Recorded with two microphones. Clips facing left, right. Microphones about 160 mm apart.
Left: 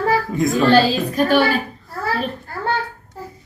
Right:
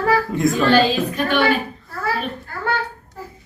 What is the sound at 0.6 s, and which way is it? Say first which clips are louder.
Speech: left 3 dB; 40° left (ahead or behind).